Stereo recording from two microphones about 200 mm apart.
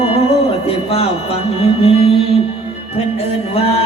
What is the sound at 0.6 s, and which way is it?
Speech, 30° left (ahead or behind).